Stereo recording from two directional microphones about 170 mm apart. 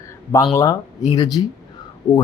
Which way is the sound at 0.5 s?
20° left (ahead or behind).